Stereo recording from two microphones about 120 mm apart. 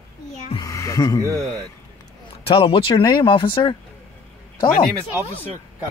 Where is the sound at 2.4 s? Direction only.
50° left (ahead or behind).